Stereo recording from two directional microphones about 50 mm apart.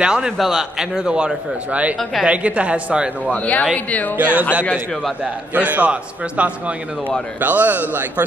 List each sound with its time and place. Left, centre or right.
0.0 s a man's voice: centre
3.3 s speech: left
4.2 s speech: right
5.7 s a man's voice: right